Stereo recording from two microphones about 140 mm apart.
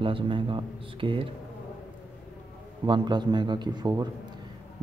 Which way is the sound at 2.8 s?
30° right (ahead or behind).